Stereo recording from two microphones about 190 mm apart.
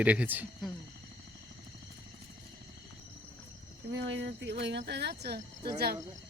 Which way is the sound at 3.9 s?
75° right (ahead or behind).